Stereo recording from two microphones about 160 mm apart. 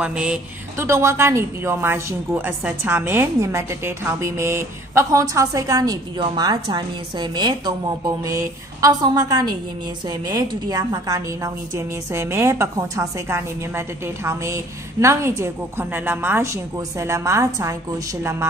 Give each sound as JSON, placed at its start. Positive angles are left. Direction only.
{"t": 0.0, "sound": "a woman's voice", "side_deg": -5}
{"t": 0.7, "sound": "a woman's voice", "side_deg": -20}